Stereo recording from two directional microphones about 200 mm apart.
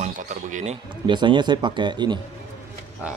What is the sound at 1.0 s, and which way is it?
Speech, 25° right (ahead or behind).